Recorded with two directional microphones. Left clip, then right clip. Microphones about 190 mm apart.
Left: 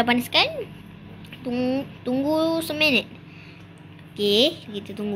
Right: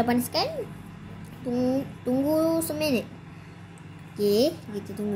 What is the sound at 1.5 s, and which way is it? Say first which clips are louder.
Speech: left 1 dB; 5° right (ahead or behind).